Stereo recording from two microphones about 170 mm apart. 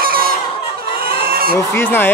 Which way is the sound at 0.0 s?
60° right (ahead or behind).